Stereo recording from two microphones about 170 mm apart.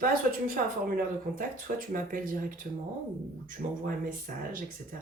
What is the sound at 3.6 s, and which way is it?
Speech, 50° right (ahead or behind).